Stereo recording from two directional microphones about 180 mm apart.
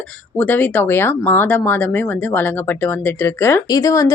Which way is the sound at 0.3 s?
10° left (ahead or behind).